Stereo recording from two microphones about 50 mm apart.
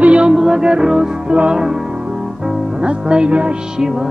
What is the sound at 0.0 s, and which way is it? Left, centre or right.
Music, right.